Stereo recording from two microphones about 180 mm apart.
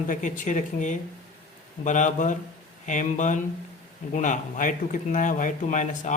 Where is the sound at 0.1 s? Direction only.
45° left (ahead or behind).